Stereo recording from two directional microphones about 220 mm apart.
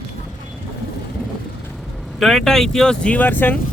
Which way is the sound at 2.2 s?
Centre (ahead or behind).